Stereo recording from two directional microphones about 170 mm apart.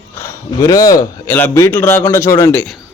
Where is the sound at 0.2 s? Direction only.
20° left (ahead or behind).